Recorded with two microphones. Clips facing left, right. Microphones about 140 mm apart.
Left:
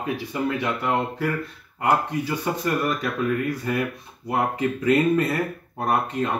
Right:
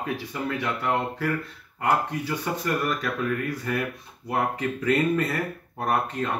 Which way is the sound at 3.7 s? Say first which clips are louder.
Left 2 dB; 15° left (ahead or behind).